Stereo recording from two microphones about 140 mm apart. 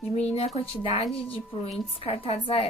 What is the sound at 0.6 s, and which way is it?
Speech, 40° left (ahead or behind).